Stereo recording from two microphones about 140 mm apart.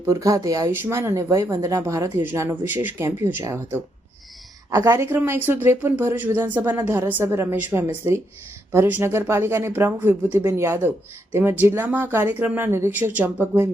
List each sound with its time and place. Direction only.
0.0 s speech: 20° right (ahead or behind)